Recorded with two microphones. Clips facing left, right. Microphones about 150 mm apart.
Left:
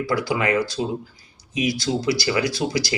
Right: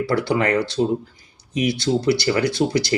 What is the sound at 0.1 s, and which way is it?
Speech, 55° right (ahead or behind).